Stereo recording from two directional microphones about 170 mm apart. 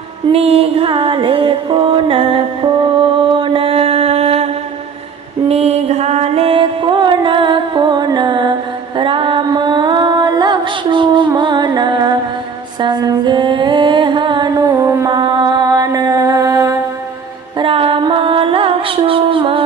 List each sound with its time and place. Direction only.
0.3 s music: 35° right (ahead or behind)
3.3 s mantra: 30° right (ahead or behind)
5.5 s music: 40° right (ahead or behind)
14.6 s mantra: 15° right (ahead or behind)
17.6 s music: 30° right (ahead or behind)